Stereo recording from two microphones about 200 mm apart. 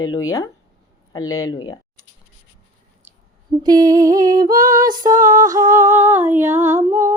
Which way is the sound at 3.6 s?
20° right (ahead or behind).